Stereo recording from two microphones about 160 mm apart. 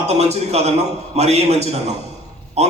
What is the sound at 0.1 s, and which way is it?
A man's voice, 40° right (ahead or behind).